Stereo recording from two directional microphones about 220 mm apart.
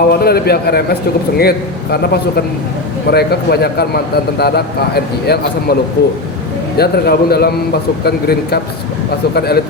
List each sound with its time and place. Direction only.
0.1 s a man's voice: 45° left (ahead or behind)